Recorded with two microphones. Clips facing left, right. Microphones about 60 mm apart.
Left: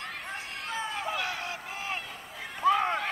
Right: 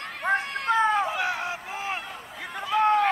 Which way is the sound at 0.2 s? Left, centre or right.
Right.